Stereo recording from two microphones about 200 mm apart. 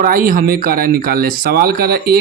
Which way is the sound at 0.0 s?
45° right (ahead or behind).